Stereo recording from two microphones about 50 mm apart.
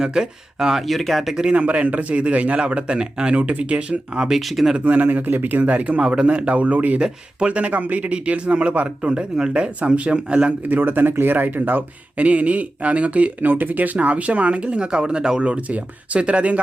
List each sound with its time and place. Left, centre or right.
0.0 s speech: centre
0.8 s speech: centre
1.4 s speech: right
4.3 s speech: centre
4.9 s speech: right
10.3 s speech: right
13.5 s speech: right